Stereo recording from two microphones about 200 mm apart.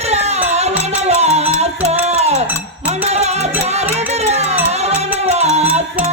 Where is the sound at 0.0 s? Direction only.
35° right (ahead or behind).